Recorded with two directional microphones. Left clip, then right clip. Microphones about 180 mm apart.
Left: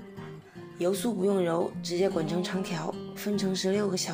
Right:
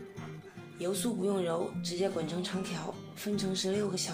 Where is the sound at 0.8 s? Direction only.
35° left (ahead or behind).